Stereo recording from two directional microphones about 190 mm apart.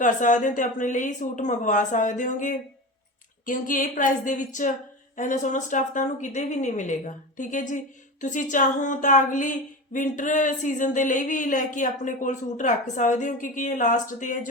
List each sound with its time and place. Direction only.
0.0 s a woman's voice: 40° left (ahead or behind)